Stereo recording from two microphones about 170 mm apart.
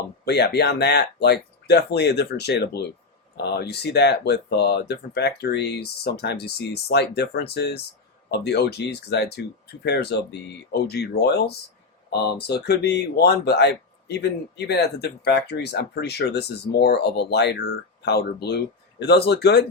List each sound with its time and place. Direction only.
0.3 s speech: 70° left (ahead or behind)